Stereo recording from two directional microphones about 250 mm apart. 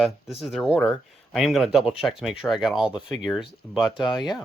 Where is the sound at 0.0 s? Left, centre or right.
Centre.